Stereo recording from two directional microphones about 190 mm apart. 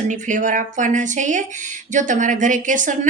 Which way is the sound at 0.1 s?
40° right (ahead or behind).